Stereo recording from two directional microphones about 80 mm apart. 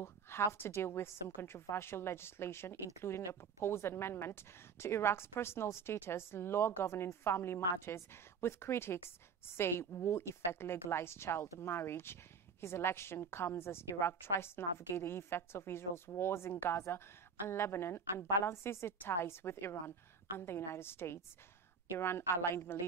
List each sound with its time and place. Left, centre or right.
0.0 s a woman's voice: left